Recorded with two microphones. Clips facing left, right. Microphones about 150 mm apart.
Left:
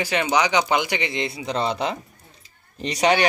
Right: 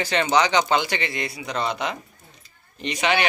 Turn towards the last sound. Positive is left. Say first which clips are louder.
# left 3 dB
turn(degrees=35)  # may be behind; listen again after turning